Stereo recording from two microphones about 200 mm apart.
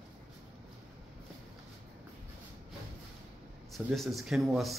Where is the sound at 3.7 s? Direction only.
Centre (ahead or behind).